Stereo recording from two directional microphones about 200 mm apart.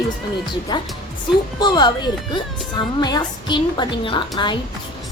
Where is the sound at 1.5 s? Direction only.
20° left (ahead or behind).